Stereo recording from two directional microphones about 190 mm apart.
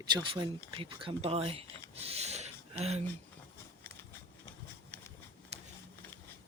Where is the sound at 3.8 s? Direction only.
10° left (ahead or behind).